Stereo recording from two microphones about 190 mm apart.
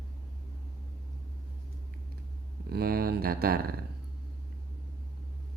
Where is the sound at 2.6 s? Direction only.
55° right (ahead or behind).